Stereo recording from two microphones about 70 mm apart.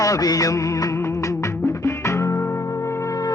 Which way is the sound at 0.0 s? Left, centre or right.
Left.